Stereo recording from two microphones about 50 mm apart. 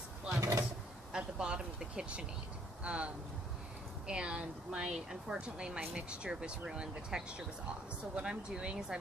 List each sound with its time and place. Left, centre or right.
0.3 s vehicle: right
1.1 s speech: centre
4.1 s speech: centre